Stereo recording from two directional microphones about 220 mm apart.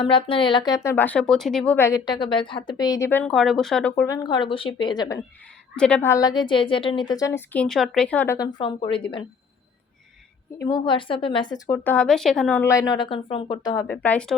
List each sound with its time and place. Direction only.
0.0 s a woman's voice: 25° left (ahead or behind)
5.7 s a woman's voice: 5° left (ahead or behind)
8.5 s speech: 25° left (ahead or behind)
10.6 s a woman's voice: 20° left (ahead or behind)